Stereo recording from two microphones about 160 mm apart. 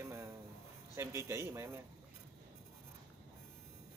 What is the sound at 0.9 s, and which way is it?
Speech, 15° right (ahead or behind).